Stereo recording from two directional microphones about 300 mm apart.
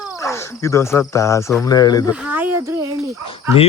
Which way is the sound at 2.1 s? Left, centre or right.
Centre.